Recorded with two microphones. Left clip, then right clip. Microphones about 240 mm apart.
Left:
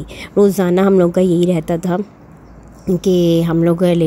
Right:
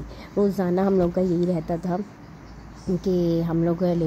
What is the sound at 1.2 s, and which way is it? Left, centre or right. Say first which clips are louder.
Speech: left 9 dB; left.